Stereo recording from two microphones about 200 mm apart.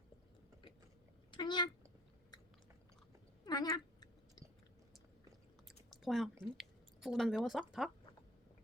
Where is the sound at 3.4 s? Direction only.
20° left (ahead or behind).